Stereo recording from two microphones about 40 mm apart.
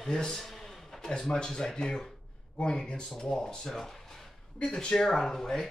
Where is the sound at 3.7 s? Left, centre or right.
Centre.